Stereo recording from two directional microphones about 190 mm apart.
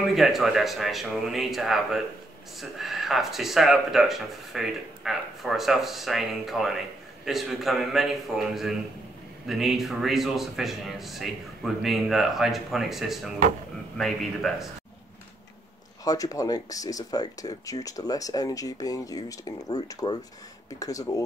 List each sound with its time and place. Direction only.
0.1 s speech: centre (ahead or behind)
16.0 s speech: 20° left (ahead or behind)